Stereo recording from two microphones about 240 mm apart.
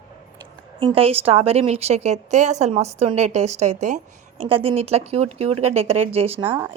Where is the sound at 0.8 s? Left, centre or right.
Right.